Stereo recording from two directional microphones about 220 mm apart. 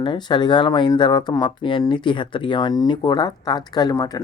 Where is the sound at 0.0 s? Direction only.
20° left (ahead or behind).